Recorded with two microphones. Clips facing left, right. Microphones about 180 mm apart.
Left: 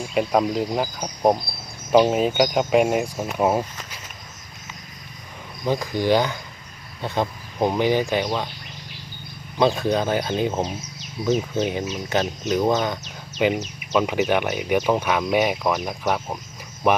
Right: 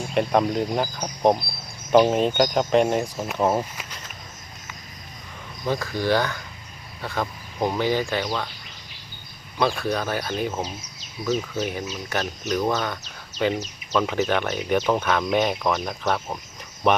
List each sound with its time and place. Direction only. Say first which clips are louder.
0.1 s speech: even; 5° left (ahead or behind)
5.6 s speech: left 3 dB; 15° left (ahead or behind)
9.6 s speech: left 4 dB; 20° left (ahead or behind)